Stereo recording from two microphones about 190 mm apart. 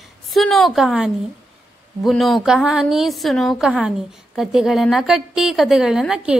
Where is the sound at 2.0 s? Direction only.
Centre (ahead or behind).